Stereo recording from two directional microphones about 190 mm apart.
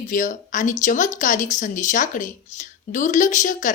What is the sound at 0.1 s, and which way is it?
A woman's voice, 40° left (ahead or behind).